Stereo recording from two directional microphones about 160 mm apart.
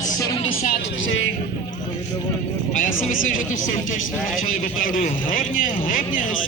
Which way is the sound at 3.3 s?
55° left (ahead or behind).